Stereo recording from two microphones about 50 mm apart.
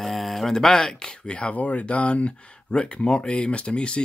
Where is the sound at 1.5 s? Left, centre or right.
Left.